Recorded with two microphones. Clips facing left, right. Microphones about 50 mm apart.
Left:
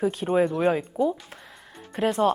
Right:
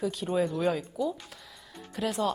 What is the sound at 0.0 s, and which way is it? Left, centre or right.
Speech, left.